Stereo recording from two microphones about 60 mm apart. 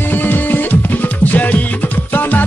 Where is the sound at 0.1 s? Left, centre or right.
Left.